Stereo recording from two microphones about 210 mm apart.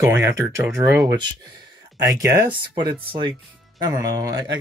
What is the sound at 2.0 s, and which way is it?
Speech, 15° right (ahead or behind).